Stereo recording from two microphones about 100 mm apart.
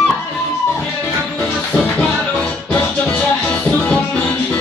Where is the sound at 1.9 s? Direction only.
10° left (ahead or behind).